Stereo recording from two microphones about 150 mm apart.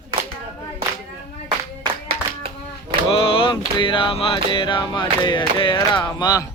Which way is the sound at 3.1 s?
35° left (ahead or behind).